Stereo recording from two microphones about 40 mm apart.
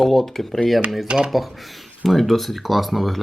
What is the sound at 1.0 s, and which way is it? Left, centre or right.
Speech, right.